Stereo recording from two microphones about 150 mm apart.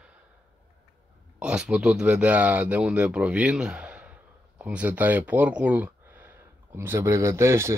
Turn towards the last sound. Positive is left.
turn(degrees=-20)  # may be behind; listen again after turning